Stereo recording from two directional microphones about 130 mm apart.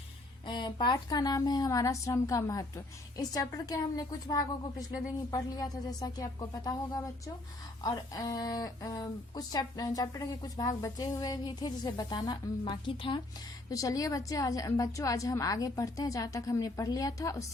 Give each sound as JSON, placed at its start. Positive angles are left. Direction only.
{"t": 0.4, "sound": "speech", "side_deg": 35}
{"t": 13.7, "sound": "speech", "side_deg": 25}